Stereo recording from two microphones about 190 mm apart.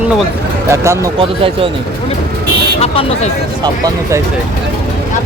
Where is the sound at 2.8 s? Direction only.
30° left (ahead or behind).